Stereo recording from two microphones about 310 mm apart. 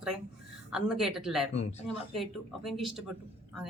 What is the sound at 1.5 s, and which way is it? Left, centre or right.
Speech, left.